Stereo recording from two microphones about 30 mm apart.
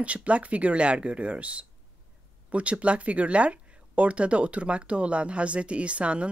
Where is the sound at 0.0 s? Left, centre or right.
Right.